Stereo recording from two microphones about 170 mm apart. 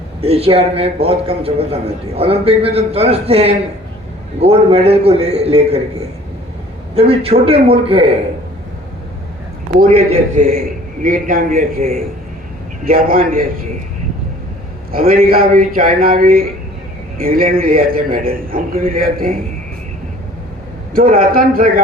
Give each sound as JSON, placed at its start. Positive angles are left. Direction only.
{"t": 0.2, "sound": "a man's voice", "side_deg": -35}
{"t": 6.9, "sound": "a man's voice", "side_deg": -35}
{"t": 9.8, "sound": "a man's voice", "side_deg": -40}
{"t": 11.0, "sound": "a man's voice", "side_deg": -55}
{"t": 12.8, "sound": "a man's voice", "side_deg": -60}
{"t": 14.9, "sound": "a man's voice", "side_deg": -60}
{"t": 20.9, "sound": "a man's voice", "side_deg": -55}